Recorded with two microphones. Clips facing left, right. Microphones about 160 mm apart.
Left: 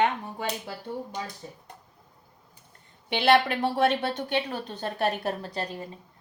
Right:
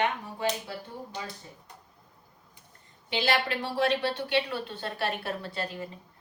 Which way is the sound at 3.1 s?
60° left (ahead or behind).